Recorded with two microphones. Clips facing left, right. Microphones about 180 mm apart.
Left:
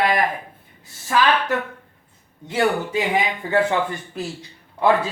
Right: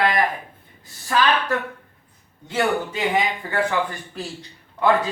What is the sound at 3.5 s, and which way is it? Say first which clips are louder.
Speech: left 4 dB; 25° left (ahead or behind).